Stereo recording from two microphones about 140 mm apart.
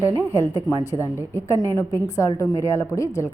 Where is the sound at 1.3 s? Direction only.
20° left (ahead or behind).